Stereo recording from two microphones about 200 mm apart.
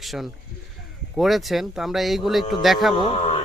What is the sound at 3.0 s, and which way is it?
Speech, 30° left (ahead or behind).